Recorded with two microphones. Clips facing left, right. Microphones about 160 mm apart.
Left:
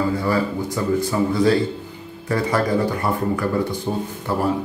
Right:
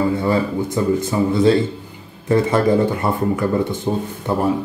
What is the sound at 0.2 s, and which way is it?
Speech, 20° right (ahead or behind).